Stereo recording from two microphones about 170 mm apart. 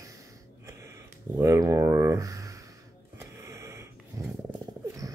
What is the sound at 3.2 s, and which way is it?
Snort, 15° right (ahead or behind).